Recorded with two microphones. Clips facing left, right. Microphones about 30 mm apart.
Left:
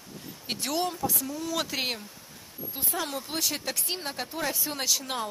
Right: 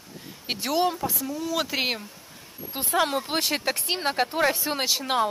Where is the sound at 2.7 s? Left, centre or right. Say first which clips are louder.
Right 9 dB; right.